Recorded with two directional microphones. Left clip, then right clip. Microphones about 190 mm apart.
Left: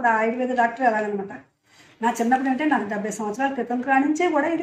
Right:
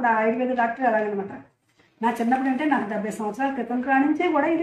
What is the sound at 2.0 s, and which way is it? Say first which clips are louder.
A woman's voice: left 2 dB; 15° left (ahead or behind).